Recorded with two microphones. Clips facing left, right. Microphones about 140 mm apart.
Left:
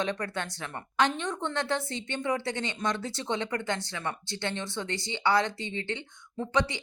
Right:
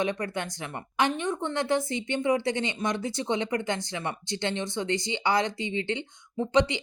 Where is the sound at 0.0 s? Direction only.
10° right (ahead or behind).